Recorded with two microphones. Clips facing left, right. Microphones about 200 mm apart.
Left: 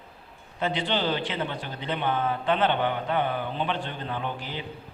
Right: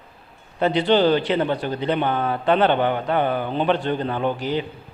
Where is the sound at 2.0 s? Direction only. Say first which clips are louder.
Right 5 dB; 70° right (ahead or behind).